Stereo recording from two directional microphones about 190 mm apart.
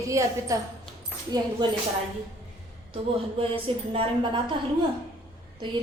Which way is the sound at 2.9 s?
30° right (ahead or behind).